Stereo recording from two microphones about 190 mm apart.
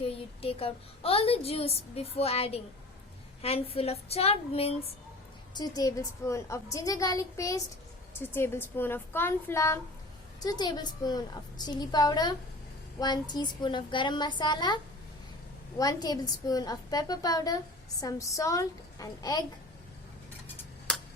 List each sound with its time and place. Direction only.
0.0 s speech: 30° left (ahead or behind)
5.5 s a woman's voice: 20° left (ahead or behind)
15.8 s a woman's voice: 20° left (ahead or behind)